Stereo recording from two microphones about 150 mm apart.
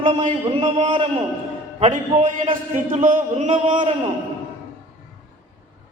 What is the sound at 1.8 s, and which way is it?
Speech, 50° right (ahead or behind).